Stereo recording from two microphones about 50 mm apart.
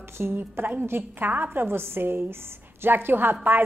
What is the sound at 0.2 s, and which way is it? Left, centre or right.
A woman's voice, right.